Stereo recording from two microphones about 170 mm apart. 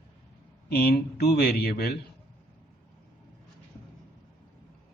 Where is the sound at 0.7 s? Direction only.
65° left (ahead or behind).